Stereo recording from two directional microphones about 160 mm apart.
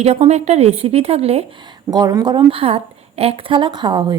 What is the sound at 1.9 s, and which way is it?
Speech, 25° right (ahead or behind).